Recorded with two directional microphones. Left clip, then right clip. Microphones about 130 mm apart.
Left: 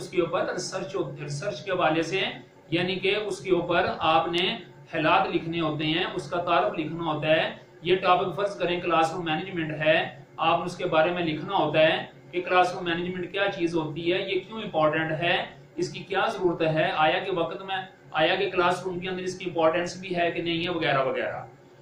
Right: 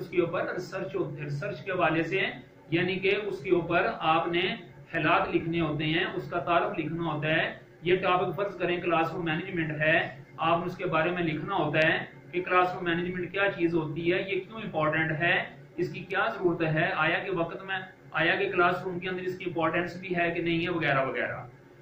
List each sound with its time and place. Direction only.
0.1 s a man's voice: 40° left (ahead or behind)